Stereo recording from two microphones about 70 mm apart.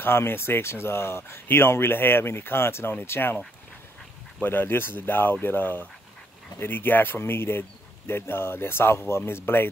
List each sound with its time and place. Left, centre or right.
0.0 s speech: left